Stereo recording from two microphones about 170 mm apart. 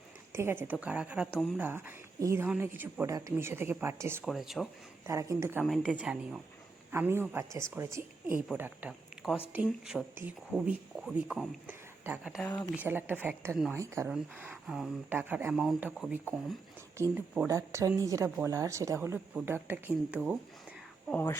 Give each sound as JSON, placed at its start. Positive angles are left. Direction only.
{"t": 0.3, "sound": "a woman's voice", "side_deg": -15}
{"t": 4.2, "sound": "speech", "side_deg": 0}
{"t": 5.0, "sound": "a woman's voice", "side_deg": -15}
{"t": 5.6, "sound": "a woman's voice", "side_deg": 0}
{"t": 8.9, "sound": "a sound", "side_deg": 0}
{"t": 9.6, "sound": "a woman's voice", "side_deg": 0}
{"t": 14.1, "sound": "a woman's voice", "side_deg": -5}
{"t": 21.1, "sound": "speech", "side_deg": 15}